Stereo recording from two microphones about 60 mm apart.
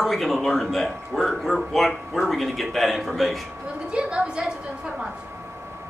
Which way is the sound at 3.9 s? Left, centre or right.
Centre.